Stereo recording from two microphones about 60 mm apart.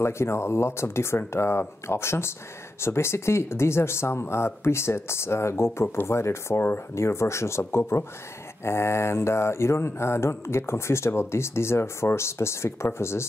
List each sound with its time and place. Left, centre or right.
0.0 s speech: left